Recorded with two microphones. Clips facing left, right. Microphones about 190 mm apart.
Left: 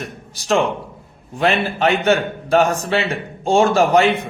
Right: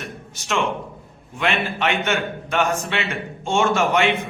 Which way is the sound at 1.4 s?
35° left (ahead or behind).